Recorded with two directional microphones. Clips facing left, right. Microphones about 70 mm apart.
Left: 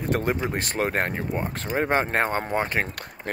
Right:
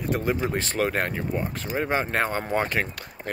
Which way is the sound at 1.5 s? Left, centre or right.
Left.